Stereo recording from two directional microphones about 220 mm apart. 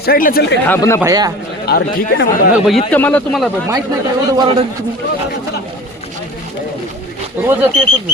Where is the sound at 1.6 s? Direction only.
45° left (ahead or behind).